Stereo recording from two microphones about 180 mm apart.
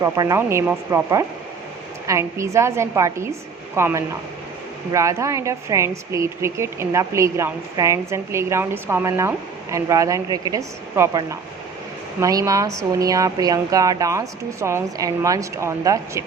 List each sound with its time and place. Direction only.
0.0 s a woman's voice: 15° right (ahead or behind)